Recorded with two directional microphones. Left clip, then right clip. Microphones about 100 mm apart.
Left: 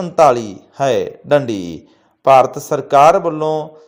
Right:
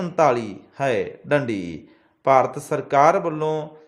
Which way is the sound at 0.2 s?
25° left (ahead or behind).